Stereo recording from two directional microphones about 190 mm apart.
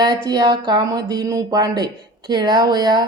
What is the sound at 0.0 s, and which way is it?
Speech, 25° right (ahead or behind).